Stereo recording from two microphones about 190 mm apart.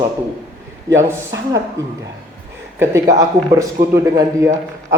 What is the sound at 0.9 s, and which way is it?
A man's voice, 15° right (ahead or behind).